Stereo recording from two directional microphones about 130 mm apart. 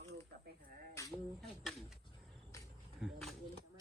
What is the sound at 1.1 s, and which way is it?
Speech, centre (ahead or behind).